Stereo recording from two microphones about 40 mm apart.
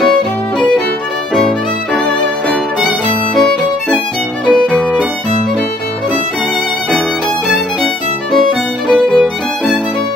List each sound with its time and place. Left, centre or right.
2.0 s music: centre
3.3 s violin: centre
7.4 s music: centre
8.9 s violin: centre